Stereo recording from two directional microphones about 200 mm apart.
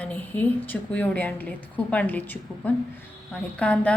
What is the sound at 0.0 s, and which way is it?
A woman's voice, 5° left (ahead or behind).